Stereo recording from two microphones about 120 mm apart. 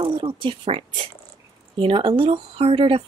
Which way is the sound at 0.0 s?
45° right (ahead or behind).